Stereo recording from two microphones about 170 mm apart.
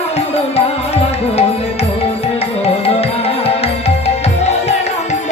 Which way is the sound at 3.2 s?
35° left (ahead or behind).